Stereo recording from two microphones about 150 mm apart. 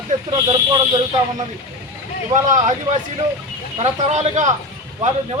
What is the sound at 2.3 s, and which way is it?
Speech, 55° right (ahead or behind).